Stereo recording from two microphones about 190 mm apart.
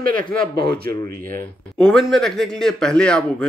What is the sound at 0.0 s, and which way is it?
Speech, 45° right (ahead or behind).